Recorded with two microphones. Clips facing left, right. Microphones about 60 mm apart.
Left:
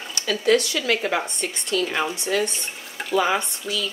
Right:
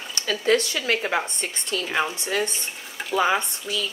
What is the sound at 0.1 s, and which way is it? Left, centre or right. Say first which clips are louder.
Speech: left 2 dB; right.